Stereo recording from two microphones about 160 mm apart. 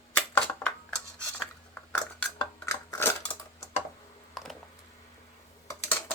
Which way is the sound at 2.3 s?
20° left (ahead or behind).